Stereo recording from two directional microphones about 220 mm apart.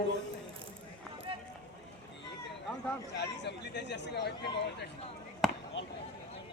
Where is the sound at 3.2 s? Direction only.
50° left (ahead or behind).